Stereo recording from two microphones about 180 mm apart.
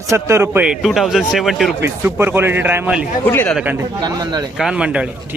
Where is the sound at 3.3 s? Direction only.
10° left (ahead or behind).